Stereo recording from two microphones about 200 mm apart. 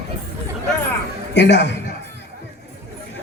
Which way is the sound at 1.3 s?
60° left (ahead or behind).